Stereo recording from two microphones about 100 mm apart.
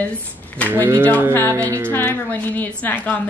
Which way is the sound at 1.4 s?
30° right (ahead or behind).